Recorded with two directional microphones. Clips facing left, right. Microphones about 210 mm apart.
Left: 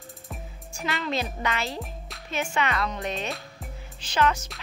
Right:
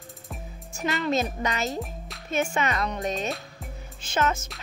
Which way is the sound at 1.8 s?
Centre (ahead or behind).